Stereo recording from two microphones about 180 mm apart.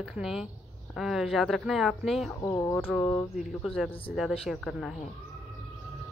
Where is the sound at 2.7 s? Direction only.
5° left (ahead or behind).